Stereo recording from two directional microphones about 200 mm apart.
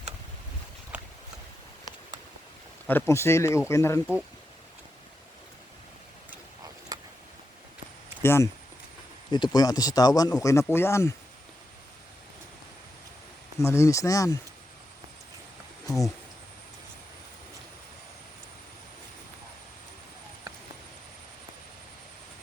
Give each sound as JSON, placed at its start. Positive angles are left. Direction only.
{"t": 2.8, "sound": "speech", "side_deg": 10}
{"t": 8.2, "sound": "speech", "side_deg": 10}
{"t": 13.6, "sound": "speech", "side_deg": 15}